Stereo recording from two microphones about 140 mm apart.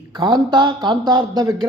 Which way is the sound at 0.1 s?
30° right (ahead or behind).